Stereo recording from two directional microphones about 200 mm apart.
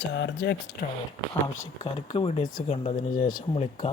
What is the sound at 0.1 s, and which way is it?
Speech, 60° left (ahead or behind).